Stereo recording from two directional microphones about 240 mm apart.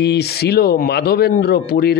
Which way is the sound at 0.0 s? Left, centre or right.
Left.